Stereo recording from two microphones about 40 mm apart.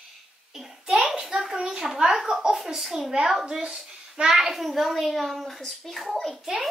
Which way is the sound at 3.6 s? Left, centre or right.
Right.